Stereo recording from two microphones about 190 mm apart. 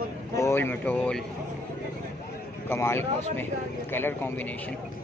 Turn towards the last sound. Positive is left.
turn(degrees=10)  # may be behind; listen again after turning